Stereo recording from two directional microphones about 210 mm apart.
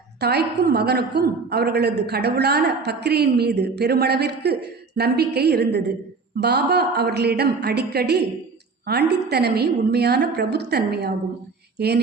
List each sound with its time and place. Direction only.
0.2 s a woman's voice: 50° right (ahead or behind)